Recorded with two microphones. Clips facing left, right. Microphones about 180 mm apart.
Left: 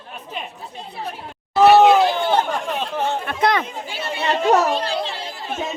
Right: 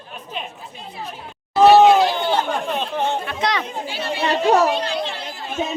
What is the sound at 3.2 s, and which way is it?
Speech, 50° left (ahead or behind).